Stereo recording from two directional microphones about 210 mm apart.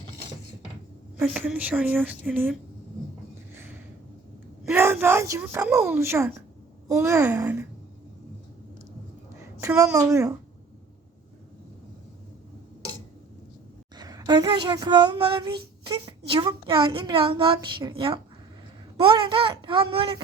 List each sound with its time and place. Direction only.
1.2 s speech: 5° right (ahead or behind)
3.5 s a sound: 10° right (ahead or behind)
4.7 s speech: 10° right (ahead or behind)
9.4 s a woman's voice: 15° right (ahead or behind)
13.9 s speech: 20° right (ahead or behind)